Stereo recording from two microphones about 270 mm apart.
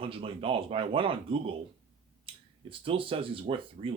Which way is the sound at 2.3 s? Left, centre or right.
Centre.